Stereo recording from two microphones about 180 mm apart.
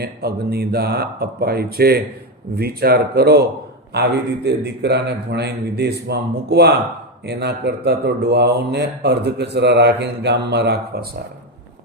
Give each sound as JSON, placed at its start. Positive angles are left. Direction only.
{"t": 0.0, "sound": "a man's voice", "side_deg": -60}